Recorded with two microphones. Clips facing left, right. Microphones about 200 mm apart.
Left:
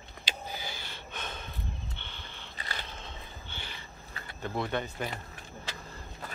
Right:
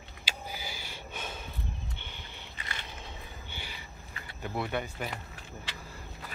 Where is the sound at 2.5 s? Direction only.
35° left (ahead or behind).